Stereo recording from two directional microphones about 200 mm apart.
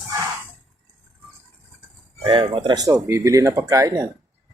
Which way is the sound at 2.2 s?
25° right (ahead or behind).